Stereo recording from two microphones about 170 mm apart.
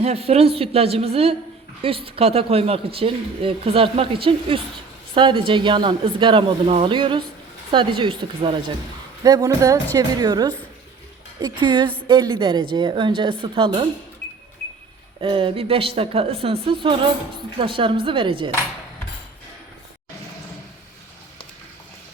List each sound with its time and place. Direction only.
0.0 s speech: 35° right (ahead or behind)
15.2 s speech: 30° right (ahead or behind)